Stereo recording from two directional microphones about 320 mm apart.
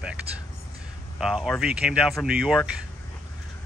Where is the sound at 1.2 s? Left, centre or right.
Centre.